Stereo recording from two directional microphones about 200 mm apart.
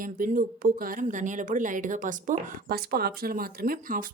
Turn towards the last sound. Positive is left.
turn(degrees=-45)  # may be behind; listen again after turning